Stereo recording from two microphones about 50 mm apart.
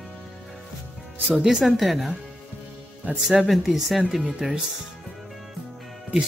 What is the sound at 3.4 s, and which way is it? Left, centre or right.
Speech, centre.